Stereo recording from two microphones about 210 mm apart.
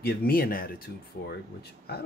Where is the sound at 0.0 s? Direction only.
45° left (ahead or behind).